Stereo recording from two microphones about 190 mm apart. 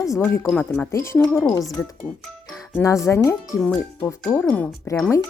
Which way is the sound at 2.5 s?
Centre (ahead or behind).